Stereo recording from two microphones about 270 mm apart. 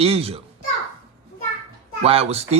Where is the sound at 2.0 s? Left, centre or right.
Right.